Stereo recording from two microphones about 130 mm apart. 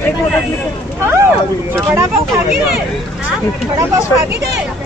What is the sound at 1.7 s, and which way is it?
Speech, 15° right (ahead or behind).